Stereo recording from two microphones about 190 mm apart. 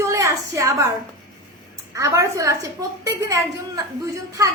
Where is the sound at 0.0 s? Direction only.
15° right (ahead or behind).